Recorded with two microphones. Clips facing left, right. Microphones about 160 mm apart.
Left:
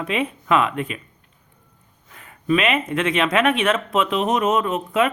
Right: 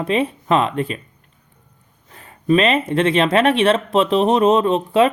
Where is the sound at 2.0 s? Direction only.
35° right (ahead or behind).